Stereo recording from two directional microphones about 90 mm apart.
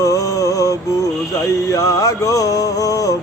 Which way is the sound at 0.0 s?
40° left (ahead or behind).